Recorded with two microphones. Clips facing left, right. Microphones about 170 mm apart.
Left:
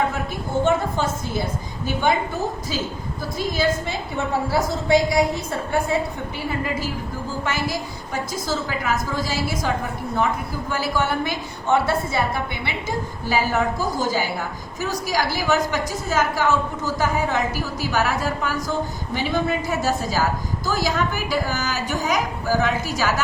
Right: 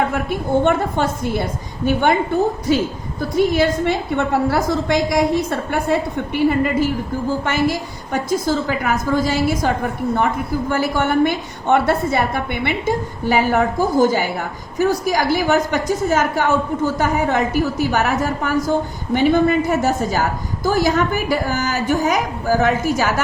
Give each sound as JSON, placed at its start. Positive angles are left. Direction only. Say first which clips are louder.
{"t": 0.1, "sound": "a woman's voice", "louder": "right 7 dB", "side_deg": -60}